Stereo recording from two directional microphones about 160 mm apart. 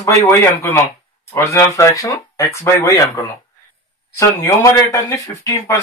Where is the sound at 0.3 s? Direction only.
15° left (ahead or behind).